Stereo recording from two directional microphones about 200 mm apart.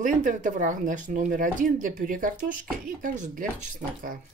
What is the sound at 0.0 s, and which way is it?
Speech, 40° right (ahead or behind).